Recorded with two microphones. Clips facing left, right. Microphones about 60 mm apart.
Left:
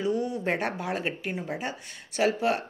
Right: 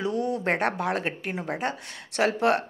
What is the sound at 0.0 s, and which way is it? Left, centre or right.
Speech, right.